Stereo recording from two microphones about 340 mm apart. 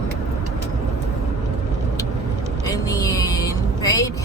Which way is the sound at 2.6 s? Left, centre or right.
Centre.